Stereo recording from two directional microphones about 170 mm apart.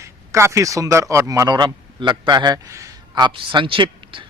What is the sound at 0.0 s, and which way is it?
A man's voice, 15° right (ahead or behind).